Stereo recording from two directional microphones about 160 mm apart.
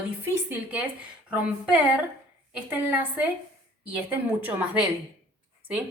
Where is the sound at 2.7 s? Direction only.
10° right (ahead or behind).